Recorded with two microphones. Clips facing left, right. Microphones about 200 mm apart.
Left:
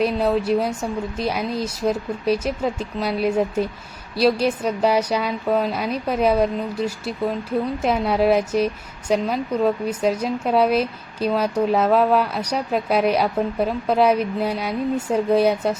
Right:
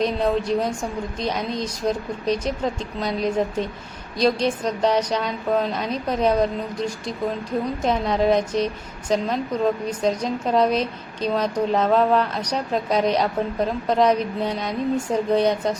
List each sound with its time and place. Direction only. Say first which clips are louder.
0.0 s a woman's voice: left 2 dB; 5° left (ahead or behind)